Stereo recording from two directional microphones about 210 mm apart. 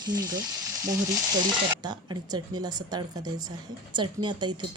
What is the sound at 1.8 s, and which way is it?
A woman's voice, 20° right (ahead or behind).